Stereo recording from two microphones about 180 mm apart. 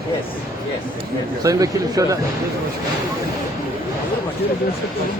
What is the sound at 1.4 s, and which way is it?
Speech, 20° right (ahead or behind).